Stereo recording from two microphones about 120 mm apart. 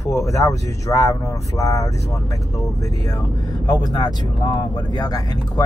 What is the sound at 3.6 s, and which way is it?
Speech, 35° left (ahead or behind).